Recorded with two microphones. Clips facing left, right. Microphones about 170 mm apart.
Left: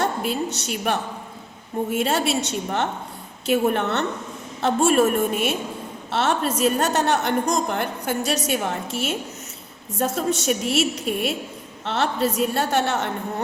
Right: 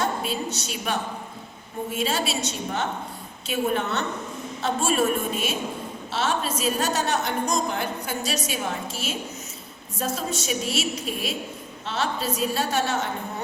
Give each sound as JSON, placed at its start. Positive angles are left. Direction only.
{"t": 0.0, "sound": "a woman's voice", "side_deg": 65}